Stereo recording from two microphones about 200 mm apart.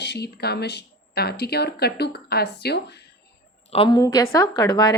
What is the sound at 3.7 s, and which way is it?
A woman's voice, 25° left (ahead or behind).